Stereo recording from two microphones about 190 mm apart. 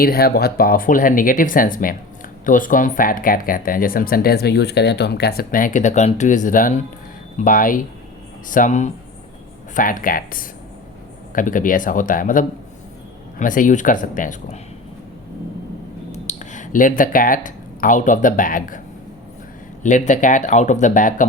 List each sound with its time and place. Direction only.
0.0 s speech: 55° left (ahead or behind)
16.1 s speech: 40° left (ahead or behind)
19.8 s speech: 40° left (ahead or behind)